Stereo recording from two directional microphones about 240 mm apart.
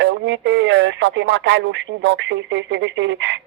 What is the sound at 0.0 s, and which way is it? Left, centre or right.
Speech, right.